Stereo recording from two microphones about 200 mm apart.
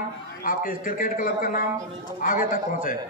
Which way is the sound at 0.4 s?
45° left (ahead or behind).